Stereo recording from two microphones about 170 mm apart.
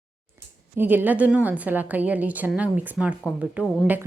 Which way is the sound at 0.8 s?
10° right (ahead or behind).